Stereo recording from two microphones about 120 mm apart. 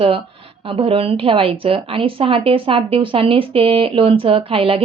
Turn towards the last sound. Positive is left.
turn(degrees=-50)  # may be behind; listen again after turning